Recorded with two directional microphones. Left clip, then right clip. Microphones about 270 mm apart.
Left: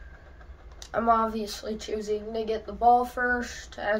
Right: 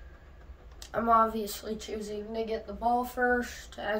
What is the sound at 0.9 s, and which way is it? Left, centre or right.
A woman's voice, centre.